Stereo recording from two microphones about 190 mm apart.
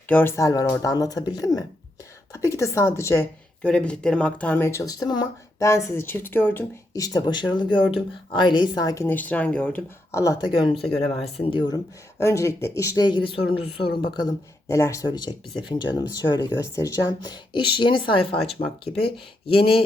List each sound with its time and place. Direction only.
0.1 s speech: 10° left (ahead or behind); by 19.7 s 30° left (ahead or behind)